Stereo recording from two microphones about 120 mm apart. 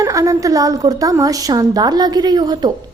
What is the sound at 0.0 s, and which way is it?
A woman's voice, 25° right (ahead or behind).